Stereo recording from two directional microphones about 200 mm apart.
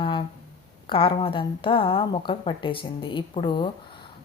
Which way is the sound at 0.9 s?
25° left (ahead or behind).